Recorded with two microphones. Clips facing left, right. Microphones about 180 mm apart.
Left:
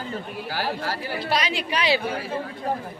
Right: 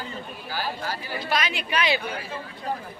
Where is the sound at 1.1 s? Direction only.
30° left (ahead or behind).